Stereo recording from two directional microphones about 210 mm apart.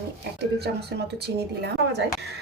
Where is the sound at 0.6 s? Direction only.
50° right (ahead or behind).